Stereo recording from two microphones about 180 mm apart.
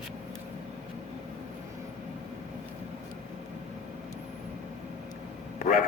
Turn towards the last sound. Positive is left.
turn(degrees=50)  # may be behind; listen again after turning